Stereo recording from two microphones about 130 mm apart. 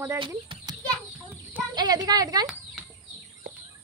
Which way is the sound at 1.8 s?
30° right (ahead or behind).